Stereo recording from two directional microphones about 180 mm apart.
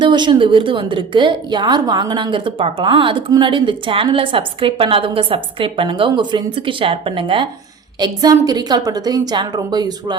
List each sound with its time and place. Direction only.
0.0 s a woman's voice: 25° right (ahead or behind)